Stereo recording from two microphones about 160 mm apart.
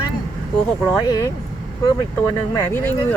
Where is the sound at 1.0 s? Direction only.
25° left (ahead or behind).